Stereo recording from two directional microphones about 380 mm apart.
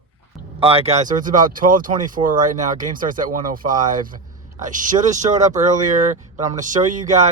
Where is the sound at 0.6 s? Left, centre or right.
Centre.